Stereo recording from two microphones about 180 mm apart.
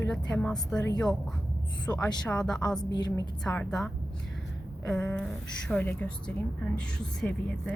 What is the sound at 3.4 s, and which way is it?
Speech, 5° left (ahead or behind).